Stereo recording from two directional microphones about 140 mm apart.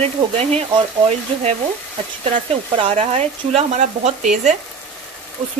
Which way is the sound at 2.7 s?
50° right (ahead or behind).